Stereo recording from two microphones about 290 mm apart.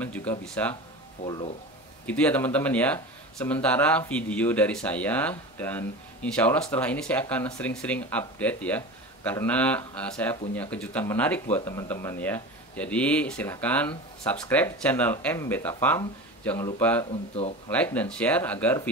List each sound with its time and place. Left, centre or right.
0.0 s speech: centre
1.2 s speech: centre
2.0 s speech: centre